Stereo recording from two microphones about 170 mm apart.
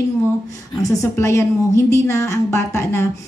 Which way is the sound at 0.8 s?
15° left (ahead or behind).